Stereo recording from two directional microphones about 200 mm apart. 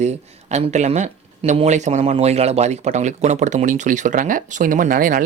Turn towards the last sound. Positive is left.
turn(degrees=-45)  # may be behind; listen again after turning